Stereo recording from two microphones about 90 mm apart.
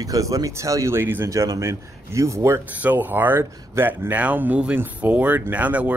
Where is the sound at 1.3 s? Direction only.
35° right (ahead or behind).